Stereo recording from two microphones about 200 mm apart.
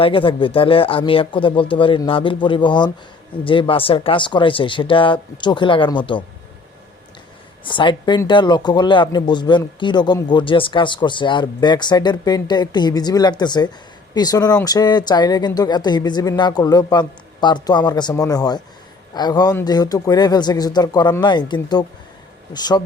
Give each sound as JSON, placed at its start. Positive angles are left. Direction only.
{"t": 0.0, "sound": "speech", "side_deg": 25}
{"t": 7.6, "sound": "speech", "side_deg": 25}